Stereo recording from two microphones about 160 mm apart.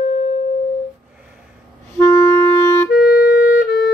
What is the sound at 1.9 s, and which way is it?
Clarinet, 15° left (ahead or behind).